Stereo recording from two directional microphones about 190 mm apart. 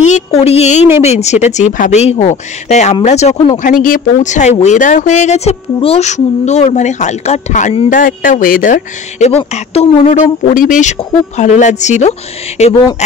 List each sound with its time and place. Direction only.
0.0 s a sound: 35° left (ahead or behind)
1.0 s speech: 35° left (ahead or behind)
7.9 s speech: 45° left (ahead or behind)